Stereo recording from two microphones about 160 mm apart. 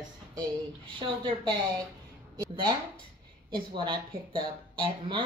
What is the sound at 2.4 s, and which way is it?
Speech, 25° right (ahead or behind).